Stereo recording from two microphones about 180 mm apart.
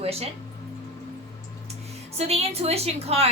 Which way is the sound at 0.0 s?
35° right (ahead or behind).